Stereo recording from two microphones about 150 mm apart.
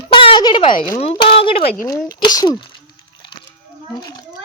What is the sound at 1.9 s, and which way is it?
Speech, 25° left (ahead or behind).